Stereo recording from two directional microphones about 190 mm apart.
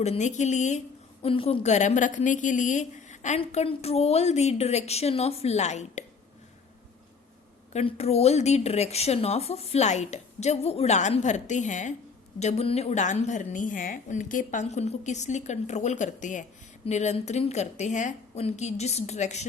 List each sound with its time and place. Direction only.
0.0 s a woman's voice: 35° left (ahead or behind)
7.7 s a woman's voice: 35° left (ahead or behind)